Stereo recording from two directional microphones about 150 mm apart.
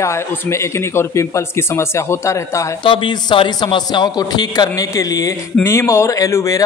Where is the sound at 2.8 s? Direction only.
35° left (ahead or behind).